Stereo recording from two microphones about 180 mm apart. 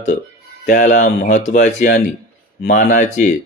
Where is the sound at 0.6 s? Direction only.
50° left (ahead or behind).